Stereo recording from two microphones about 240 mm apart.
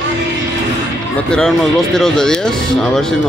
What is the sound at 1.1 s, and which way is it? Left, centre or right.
Speech, centre.